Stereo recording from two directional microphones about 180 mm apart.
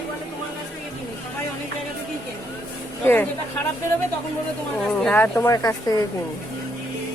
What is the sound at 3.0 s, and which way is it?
Speech, 10° left (ahead or behind).